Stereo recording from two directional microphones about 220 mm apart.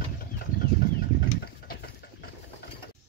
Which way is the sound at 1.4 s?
50° left (ahead or behind).